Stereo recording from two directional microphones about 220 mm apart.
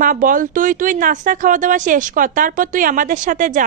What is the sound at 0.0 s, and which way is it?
Speech, 40° right (ahead or behind).